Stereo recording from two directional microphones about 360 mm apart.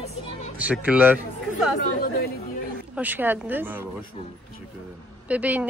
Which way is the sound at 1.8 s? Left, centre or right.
Left.